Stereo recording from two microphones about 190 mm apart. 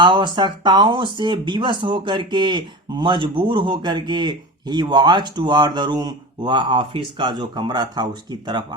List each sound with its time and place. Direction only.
0.0 s speech: 25° right (ahead or behind)